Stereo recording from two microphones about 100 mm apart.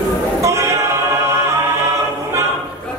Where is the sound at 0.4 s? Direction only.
30° right (ahead or behind).